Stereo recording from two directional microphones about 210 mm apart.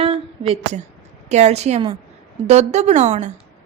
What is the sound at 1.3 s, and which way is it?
A woman's voice, 30° right (ahead or behind).